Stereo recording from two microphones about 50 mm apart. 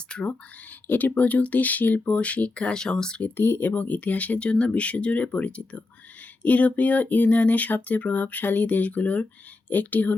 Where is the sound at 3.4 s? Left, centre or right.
Left.